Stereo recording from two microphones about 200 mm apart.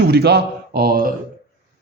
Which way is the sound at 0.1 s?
55° right (ahead or behind).